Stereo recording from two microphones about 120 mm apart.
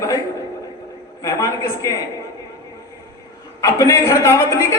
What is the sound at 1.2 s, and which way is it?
Speech, 25° left (ahead or behind).